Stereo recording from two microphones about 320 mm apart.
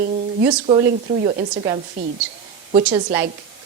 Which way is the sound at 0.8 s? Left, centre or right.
Right.